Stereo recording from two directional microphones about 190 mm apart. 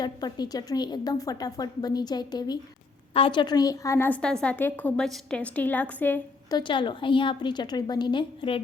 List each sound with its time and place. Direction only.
0.0 s a woman's voice: 20° left (ahead or behind)
6.6 s a woman's voice: 25° left (ahead or behind)